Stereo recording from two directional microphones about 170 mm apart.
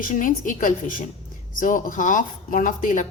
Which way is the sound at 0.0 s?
50° left (ahead or behind).